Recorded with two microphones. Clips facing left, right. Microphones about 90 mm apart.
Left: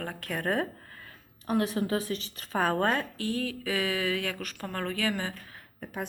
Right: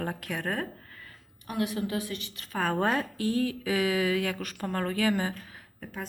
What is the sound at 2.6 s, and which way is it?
Speech, centre (ahead or behind).